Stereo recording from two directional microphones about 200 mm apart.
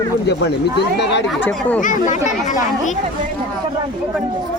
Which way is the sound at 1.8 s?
40° left (ahead or behind).